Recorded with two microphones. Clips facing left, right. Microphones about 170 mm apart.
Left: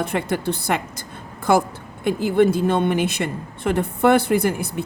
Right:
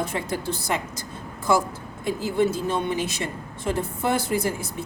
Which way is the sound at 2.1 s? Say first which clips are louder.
Left 6 dB; 60° left (ahead or behind).